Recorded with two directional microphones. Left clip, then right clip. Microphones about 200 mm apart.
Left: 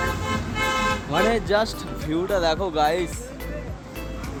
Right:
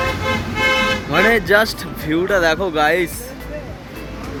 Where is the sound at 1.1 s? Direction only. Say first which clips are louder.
Right 8 dB; centre (ahead or behind).